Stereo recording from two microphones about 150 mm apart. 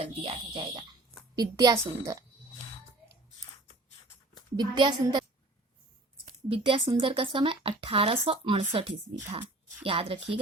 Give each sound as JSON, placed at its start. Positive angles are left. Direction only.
{"t": 0.0, "sound": "a woman's voice", "side_deg": -40}
{"t": 1.4, "sound": "a woman's voice", "side_deg": -25}
{"t": 4.5, "sound": "a woman's voice", "side_deg": -30}
{"t": 6.2, "sound": "a woman's voice", "side_deg": -35}
{"t": 9.8, "sound": "a woman's voice", "side_deg": -40}